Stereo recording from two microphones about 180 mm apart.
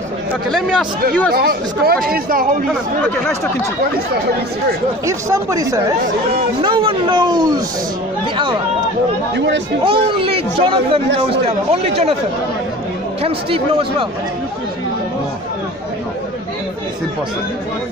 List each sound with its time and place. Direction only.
0.5 s speech: centre (ahead or behind)
1.3 s speech: 60° right (ahead or behind)
2.7 s speech: 10° left (ahead or behind)
5.0 s speech: 20° right (ahead or behind)
9.8 s speech: 30° right (ahead or behind)
13.2 s speech: 30° right (ahead or behind)